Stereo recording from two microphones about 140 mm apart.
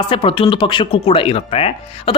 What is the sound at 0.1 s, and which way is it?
Speech, 40° left (ahead or behind).